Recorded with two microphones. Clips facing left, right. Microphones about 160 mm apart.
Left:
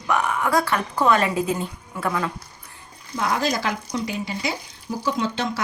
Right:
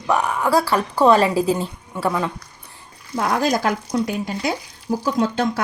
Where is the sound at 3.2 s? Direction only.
50° right (ahead or behind).